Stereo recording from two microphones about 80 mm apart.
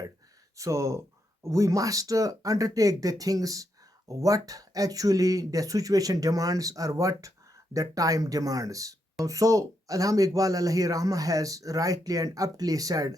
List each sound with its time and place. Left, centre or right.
0.5 s speech: right